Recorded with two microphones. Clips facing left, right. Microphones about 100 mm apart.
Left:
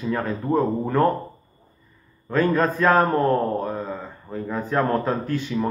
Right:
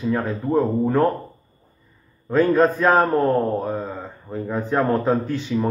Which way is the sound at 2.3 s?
15° right (ahead or behind).